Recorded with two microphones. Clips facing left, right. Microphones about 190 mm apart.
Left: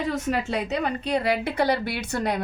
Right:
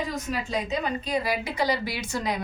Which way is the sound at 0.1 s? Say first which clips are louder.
Left 4 dB; 70° left (ahead or behind).